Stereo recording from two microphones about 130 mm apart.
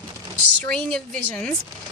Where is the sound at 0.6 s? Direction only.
5° left (ahead or behind).